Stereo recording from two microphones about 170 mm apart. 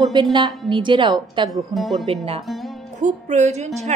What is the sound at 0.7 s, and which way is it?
Speech, 30° right (ahead or behind).